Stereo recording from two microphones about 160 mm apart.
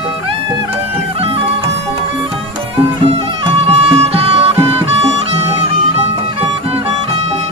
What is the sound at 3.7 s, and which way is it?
Music, 40° right (ahead or behind).